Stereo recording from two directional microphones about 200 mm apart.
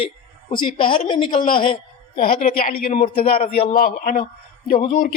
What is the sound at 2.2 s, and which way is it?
Speech, 45° left (ahead or behind).